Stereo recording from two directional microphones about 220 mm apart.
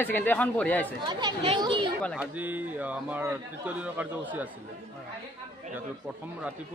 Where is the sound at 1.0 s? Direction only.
20° right (ahead or behind).